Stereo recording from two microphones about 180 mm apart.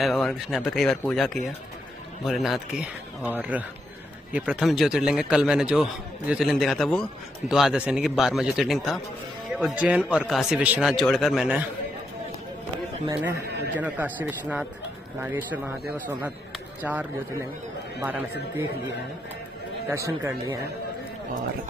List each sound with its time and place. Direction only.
0.0 s a man's voice: centre (ahead or behind)
13.1 s a man's voice: 10° right (ahead or behind)
16.8 s a man's voice: 10° right (ahead or behind)
19.9 s a man's voice: 15° right (ahead or behind)